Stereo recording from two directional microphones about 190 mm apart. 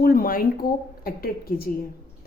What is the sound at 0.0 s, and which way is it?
A woman's voice, 50° left (ahead or behind).